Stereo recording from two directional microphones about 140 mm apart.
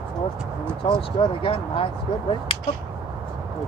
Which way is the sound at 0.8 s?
40° left (ahead or behind).